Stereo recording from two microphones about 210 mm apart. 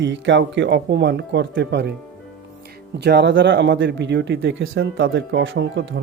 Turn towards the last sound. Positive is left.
turn(degrees=-60)  # may be behind; listen again after turning